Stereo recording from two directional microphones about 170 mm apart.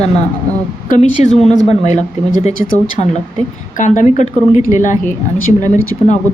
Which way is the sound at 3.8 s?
50° left (ahead or behind).